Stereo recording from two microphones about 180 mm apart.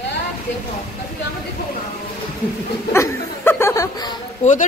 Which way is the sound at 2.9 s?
15° left (ahead or behind).